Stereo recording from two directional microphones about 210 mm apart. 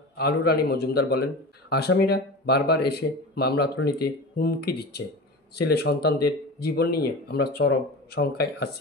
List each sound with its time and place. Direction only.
0.2 s a man's voice: 50° left (ahead or behind)